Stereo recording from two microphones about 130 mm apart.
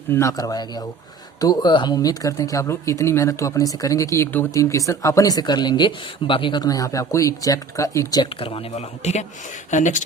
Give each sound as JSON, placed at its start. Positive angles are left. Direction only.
{"t": 0.1, "sound": "speech", "side_deg": 25}
{"t": 8.4, "sound": "speech", "side_deg": 45}
{"t": 9.0, "sound": "speech", "side_deg": 60}
{"t": 9.6, "sound": "speech", "side_deg": 70}